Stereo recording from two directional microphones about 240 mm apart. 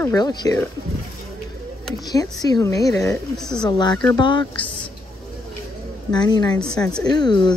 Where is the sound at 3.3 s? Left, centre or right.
Centre.